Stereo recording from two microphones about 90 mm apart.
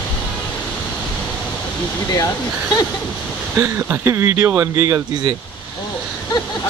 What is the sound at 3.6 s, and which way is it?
Speech, 30° right (ahead or behind).